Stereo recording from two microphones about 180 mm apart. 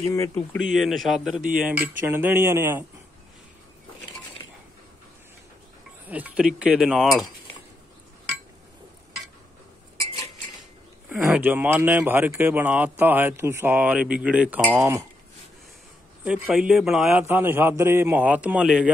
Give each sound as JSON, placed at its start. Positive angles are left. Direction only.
{"t": 0.0, "sound": "speech", "side_deg": 15}
{"t": 0.6, "sound": "speech", "side_deg": 0}
{"t": 6.0, "sound": "speech", "side_deg": -10}
{"t": 11.1, "sound": "speech", "side_deg": -10}
{"t": 16.3, "sound": "speech", "side_deg": -5}